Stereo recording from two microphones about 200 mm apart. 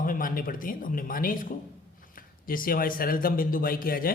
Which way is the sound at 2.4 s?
45° left (ahead or behind).